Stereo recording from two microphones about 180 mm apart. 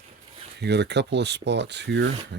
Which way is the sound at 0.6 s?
70° right (ahead or behind).